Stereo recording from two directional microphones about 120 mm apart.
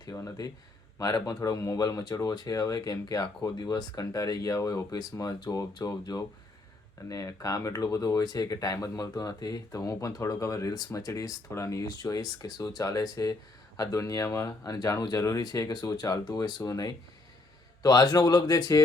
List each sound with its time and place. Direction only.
0.0 s speech: 30° left (ahead or behind)